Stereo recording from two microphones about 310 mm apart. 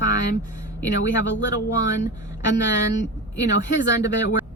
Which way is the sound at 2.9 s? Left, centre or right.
Left.